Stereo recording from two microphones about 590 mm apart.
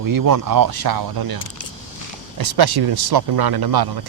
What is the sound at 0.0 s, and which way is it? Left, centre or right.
Speech, right.